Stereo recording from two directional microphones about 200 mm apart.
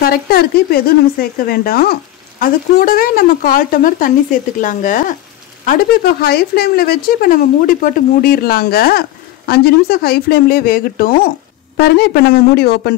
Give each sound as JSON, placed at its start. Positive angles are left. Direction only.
{"t": 0.0, "sound": "speech", "side_deg": 50}